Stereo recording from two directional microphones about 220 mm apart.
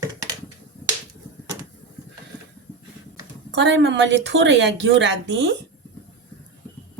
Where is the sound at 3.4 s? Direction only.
55° right (ahead or behind).